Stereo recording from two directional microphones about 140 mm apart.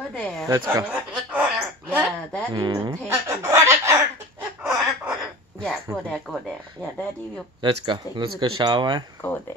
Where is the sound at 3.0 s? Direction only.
20° right (ahead or behind).